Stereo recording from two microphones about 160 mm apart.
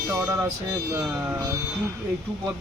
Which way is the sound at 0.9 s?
10° right (ahead or behind).